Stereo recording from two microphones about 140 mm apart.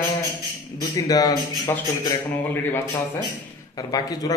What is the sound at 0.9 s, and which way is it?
Speech, 25° left (ahead or behind).